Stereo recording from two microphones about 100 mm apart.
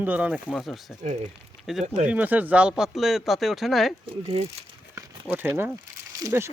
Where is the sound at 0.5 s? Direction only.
Centre (ahead or behind).